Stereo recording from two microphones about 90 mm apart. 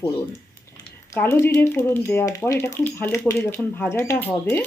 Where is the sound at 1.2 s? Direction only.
25° left (ahead or behind).